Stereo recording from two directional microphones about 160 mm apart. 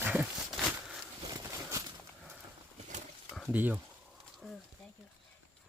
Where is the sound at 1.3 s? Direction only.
20° right (ahead or behind).